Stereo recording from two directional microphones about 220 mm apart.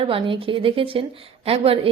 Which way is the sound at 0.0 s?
25° right (ahead or behind).